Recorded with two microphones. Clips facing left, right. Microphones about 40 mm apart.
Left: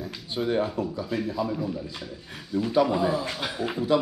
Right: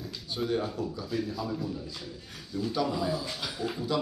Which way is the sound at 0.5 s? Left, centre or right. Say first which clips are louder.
Left 6 dB; left.